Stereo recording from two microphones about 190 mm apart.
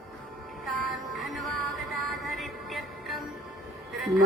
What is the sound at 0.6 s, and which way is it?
Music, centre (ahead or behind).